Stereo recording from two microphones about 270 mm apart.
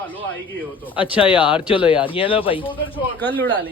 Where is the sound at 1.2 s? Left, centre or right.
Centre.